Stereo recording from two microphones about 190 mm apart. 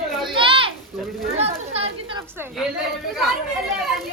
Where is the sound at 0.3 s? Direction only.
25° right (ahead or behind).